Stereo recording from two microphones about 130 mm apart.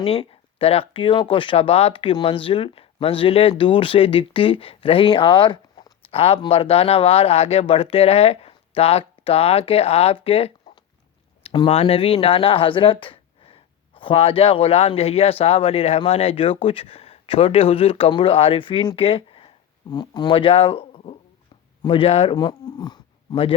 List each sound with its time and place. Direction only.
0.0 s speech: 45° left (ahead or behind)